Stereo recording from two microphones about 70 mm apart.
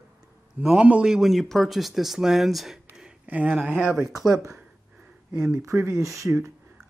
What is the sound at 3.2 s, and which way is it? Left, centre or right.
Speech, right.